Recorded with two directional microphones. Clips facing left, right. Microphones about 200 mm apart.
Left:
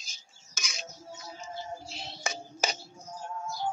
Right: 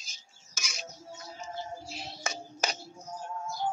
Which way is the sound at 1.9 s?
5° right (ahead or behind).